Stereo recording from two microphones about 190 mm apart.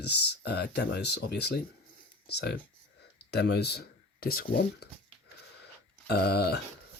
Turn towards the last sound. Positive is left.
turn(degrees=60)  # may be behind; listen again after turning